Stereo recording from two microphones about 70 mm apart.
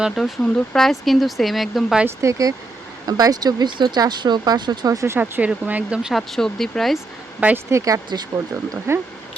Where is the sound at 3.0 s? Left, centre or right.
Right.